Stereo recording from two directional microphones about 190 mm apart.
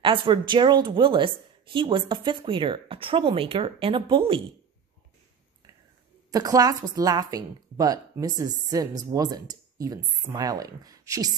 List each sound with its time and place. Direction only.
0.0 s a woman's voice: 25° right (ahead or behind)
6.3 s a woman's voice: 20° right (ahead or behind)